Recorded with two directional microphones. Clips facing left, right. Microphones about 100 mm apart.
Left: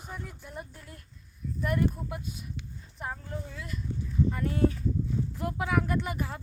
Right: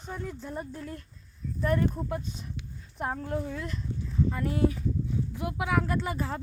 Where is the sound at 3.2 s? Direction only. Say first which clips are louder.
Right 8 dB; 60° right (ahead or behind).